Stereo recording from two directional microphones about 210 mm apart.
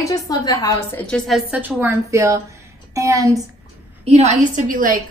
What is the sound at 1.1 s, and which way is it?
A woman's voice, centre (ahead or behind).